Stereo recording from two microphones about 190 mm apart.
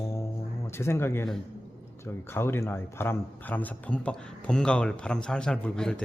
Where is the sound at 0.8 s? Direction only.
15° left (ahead or behind).